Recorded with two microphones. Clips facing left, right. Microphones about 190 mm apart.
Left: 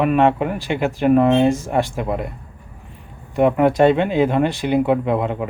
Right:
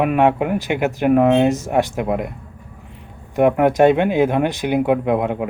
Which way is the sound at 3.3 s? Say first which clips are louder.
Right 1 dB; 10° right (ahead or behind).